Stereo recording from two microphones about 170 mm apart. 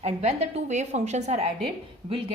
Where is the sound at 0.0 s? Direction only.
40° right (ahead or behind).